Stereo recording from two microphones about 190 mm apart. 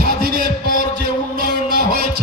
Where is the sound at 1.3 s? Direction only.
55° right (ahead or behind).